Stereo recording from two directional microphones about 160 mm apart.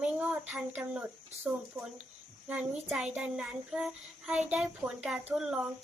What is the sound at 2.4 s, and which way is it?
A child's voice, 10° right (ahead or behind).